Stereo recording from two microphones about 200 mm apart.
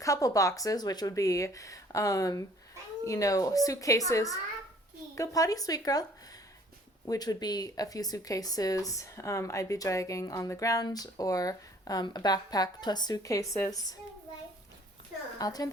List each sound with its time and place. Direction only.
0.0 s a woman's voice: 15° left (ahead or behind)
15.4 s a woman's voice: 20° left (ahead or behind)